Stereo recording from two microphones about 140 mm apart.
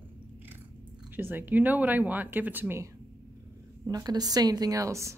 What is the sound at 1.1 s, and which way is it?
Speech, 15° right (ahead or behind).